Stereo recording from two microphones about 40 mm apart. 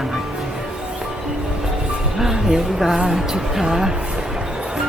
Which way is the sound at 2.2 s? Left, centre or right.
Centre.